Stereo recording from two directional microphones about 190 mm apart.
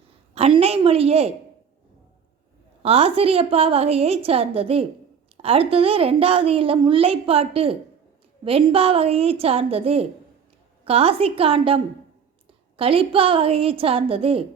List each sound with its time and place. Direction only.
0.3 s a woman's voice: 30° right (ahead or behind)
2.8 s a woman's voice: 30° right (ahead or behind)